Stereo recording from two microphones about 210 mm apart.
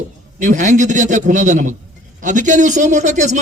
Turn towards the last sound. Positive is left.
turn(degrees=-35)  # may be behind; listen again after turning